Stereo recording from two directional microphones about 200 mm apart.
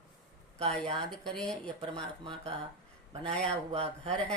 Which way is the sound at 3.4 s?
30° right (ahead or behind).